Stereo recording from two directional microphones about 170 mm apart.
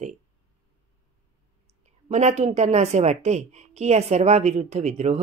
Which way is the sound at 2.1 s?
40° right (ahead or behind).